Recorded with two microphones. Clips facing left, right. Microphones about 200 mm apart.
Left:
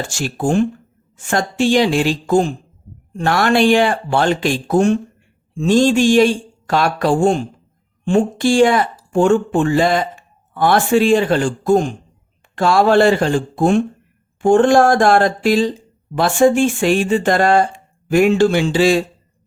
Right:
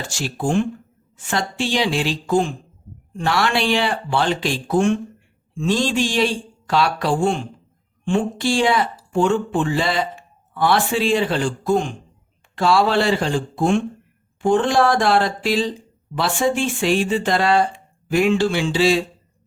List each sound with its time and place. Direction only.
0.1 s speech: 50° left (ahead or behind)